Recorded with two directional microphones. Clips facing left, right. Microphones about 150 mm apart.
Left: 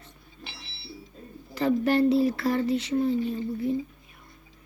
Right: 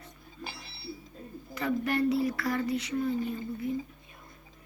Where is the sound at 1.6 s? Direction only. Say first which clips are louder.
Left 6 dB; 30° left (ahead or behind).